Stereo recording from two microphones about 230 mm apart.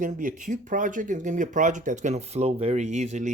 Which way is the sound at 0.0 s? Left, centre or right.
Right.